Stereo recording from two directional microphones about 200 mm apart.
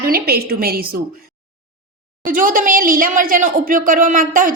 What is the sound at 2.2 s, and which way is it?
Speech, 45° right (ahead or behind).